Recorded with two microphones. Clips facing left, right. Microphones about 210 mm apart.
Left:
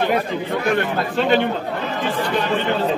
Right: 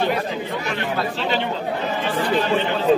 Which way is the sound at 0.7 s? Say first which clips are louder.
Left 6 dB; 55° left (ahead or behind).